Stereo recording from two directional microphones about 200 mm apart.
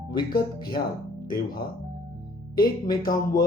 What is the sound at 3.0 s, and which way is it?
Speech, 45° left (ahead or behind).